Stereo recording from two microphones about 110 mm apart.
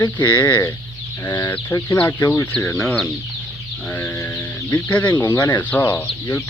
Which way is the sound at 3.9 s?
20° left (ahead or behind).